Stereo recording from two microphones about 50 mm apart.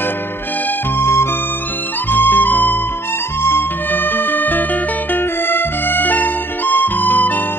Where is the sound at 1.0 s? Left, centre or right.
Left.